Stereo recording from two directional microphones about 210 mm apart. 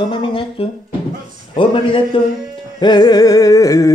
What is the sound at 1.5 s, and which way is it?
Speech, 25° left (ahead or behind).